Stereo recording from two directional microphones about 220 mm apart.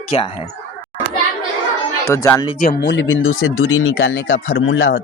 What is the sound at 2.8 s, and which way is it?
Speech, 60° left (ahead or behind).